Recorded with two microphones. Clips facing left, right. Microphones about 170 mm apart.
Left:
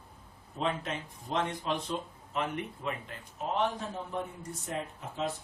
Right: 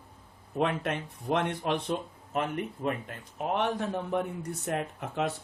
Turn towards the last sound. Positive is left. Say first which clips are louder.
# right 4 dB
turn(degrees=-65)  # may be behind; listen again after turning